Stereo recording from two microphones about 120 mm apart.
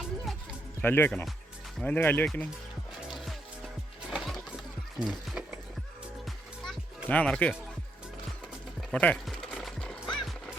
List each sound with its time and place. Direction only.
0.8 s speech: 20° left (ahead or behind)
3.1 s music: centre (ahead or behind)
4.9 s speech: 5° right (ahead or behind)
7.1 s speech: 10° left (ahead or behind)
8.9 s speech: 10° left (ahead or behind)
9.2 s horse: 5° left (ahead or behind)